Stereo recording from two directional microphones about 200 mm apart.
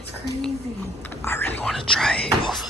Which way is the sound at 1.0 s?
10° left (ahead or behind).